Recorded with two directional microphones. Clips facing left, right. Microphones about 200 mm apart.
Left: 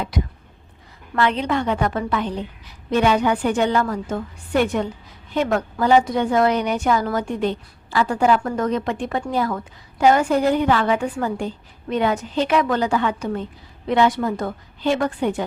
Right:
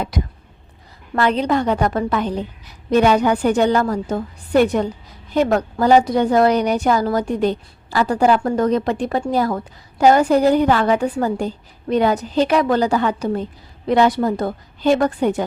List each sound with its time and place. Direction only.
0.1 s a woman's voice: 40° right (ahead or behind)